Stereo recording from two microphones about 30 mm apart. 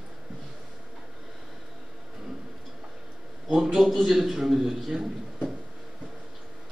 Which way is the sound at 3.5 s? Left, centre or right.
Centre.